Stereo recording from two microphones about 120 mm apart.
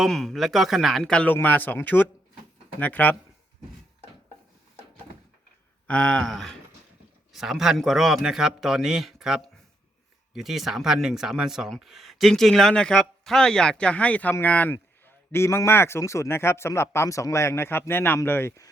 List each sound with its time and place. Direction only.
0.0 s speech: centre (ahead or behind)
5.9 s a man's voice: 10° left (ahead or behind); by 18.7 s 25° left (ahead or behind)